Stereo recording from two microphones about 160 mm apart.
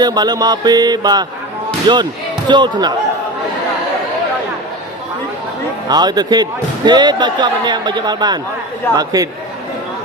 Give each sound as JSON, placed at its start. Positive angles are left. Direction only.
{"t": 0.0, "sound": "speech", "side_deg": -25}
{"t": 5.9, "sound": "speech", "side_deg": -25}